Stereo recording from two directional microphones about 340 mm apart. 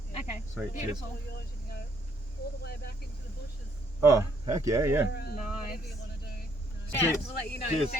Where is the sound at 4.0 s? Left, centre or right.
Centre.